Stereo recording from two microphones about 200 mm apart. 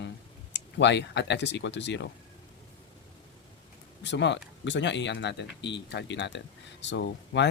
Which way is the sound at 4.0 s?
60° left (ahead or behind).